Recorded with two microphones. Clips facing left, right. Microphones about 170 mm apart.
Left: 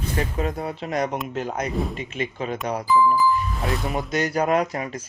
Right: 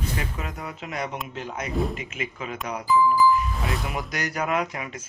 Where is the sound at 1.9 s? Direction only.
30° left (ahead or behind).